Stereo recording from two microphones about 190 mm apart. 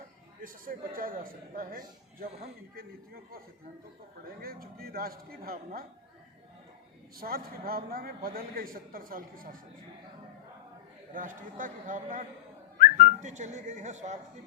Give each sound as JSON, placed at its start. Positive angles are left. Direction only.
{"t": 0.4, "sound": "a man's voice", "side_deg": -50}
{"t": 4.4, "sound": "a man's voice", "side_deg": -50}
{"t": 7.2, "sound": "a man's voice", "side_deg": -50}
{"t": 11.1, "sound": "a man's voice", "side_deg": -45}